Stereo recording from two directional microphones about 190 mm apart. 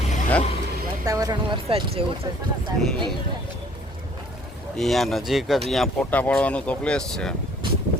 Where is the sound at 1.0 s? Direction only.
20° right (ahead or behind).